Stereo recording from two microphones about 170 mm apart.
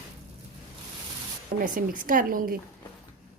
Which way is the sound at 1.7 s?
55° right (ahead or behind).